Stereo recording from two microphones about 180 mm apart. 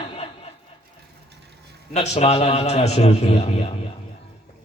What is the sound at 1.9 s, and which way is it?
Speech, 35° left (ahead or behind).